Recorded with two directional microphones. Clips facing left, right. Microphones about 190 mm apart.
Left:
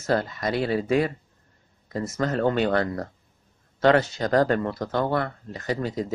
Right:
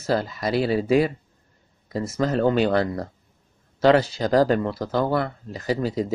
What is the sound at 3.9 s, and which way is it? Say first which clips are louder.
Speech: right 3 dB; 30° right (ahead or behind).